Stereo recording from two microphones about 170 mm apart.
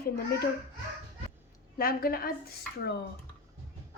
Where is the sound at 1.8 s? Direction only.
60° left (ahead or behind).